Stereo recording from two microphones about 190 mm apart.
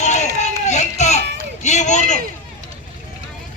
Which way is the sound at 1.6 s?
40° left (ahead or behind).